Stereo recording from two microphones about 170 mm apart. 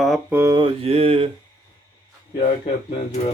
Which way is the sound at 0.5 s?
35° right (ahead or behind).